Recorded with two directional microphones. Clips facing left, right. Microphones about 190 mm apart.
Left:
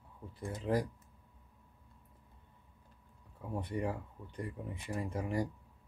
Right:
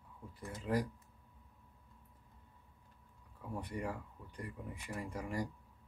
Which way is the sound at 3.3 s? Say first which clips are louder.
Left 4 dB; 20° left (ahead or behind).